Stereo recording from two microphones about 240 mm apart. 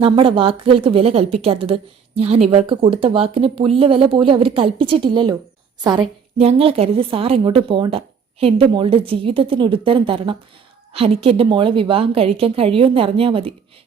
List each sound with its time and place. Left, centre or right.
0.0 s a woman's voice: right